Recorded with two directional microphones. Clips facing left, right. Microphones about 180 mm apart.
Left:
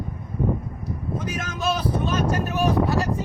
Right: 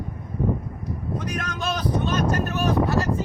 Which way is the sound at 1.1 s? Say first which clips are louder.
Even; 5° left (ahead or behind).